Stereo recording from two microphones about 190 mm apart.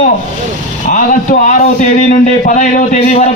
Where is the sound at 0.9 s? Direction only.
40° left (ahead or behind).